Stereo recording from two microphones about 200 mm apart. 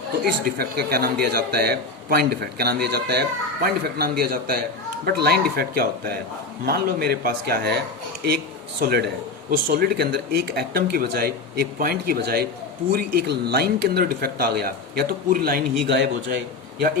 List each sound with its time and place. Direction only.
0.4 s a man's voice: 50° right (ahead or behind)